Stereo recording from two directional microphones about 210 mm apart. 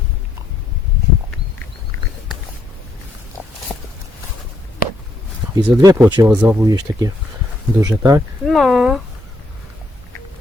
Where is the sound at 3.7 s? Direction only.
Centre (ahead or behind).